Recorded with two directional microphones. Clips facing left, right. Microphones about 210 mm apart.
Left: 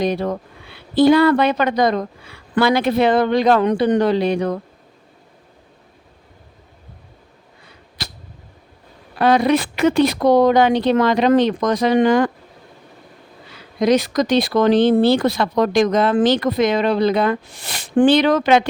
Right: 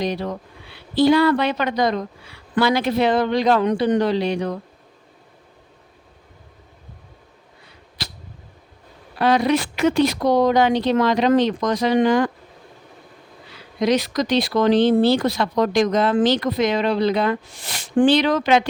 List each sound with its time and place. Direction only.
0.0 s a woman's voice: 50° left (ahead or behind)
9.1 s a woman's voice: 55° left (ahead or behind)
13.7 s speech: 50° left (ahead or behind)
18.0 s a woman's voice: 55° left (ahead or behind)